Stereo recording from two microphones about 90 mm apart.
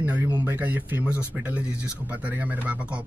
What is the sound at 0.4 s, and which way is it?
Speech, 20° right (ahead or behind).